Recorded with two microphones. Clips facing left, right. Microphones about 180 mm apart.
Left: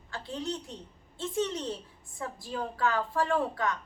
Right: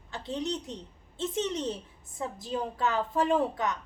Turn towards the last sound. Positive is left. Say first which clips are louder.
# right 2 dB
turn(degrees=-20)  # may be behind; listen again after turning